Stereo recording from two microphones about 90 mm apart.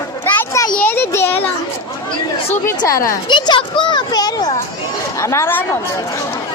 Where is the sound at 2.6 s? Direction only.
35° left (ahead or behind).